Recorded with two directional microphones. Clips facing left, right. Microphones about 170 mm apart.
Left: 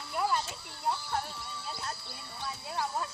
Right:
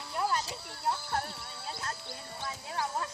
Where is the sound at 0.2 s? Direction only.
5° left (ahead or behind).